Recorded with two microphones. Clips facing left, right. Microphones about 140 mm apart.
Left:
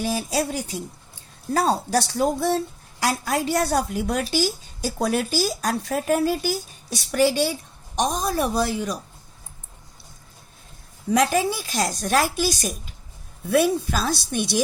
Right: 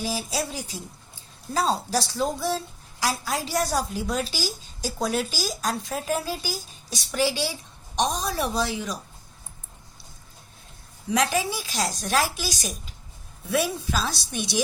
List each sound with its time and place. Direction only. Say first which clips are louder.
0.0 s speech: left 5 dB; 55° left (ahead or behind)
11.1 s speech: left 4 dB; 50° left (ahead or behind)